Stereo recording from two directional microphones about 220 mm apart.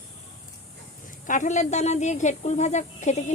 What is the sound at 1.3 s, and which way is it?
Speech, 35° left (ahead or behind).